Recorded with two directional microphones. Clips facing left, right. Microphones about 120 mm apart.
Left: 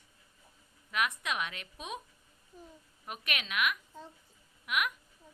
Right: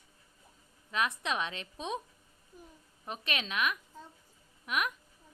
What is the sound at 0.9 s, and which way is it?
Speech, 30° right (ahead or behind).